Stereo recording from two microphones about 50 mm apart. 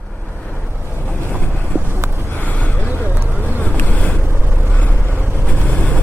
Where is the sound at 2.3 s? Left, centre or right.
Left.